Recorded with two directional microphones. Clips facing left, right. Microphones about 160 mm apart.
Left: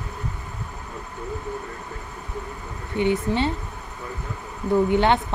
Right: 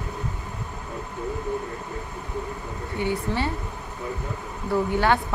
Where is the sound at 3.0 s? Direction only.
20° left (ahead or behind).